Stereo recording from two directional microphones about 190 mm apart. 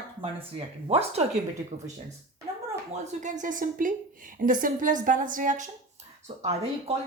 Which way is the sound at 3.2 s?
40° right (ahead or behind).